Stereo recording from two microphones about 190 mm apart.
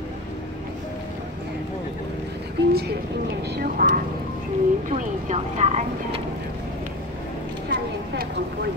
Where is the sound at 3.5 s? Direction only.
50° right (ahead or behind).